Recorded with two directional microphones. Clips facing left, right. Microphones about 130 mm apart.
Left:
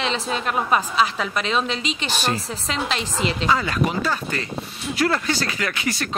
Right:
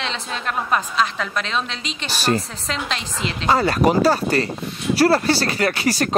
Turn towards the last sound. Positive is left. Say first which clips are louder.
# right 6 dB
turn(degrees=-35)  # may be behind; listen again after turning